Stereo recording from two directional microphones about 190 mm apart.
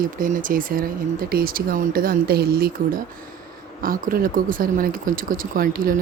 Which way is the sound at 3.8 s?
50° right (ahead or behind).